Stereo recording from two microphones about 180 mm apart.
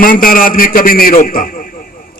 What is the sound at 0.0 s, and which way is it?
A man's voice, 50° left (ahead or behind).